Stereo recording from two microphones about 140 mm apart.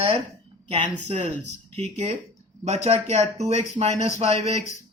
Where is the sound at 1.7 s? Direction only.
50° right (ahead or behind).